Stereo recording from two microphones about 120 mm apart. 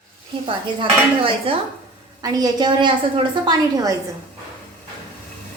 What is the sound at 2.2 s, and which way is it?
A woman's voice, 35° right (ahead or behind).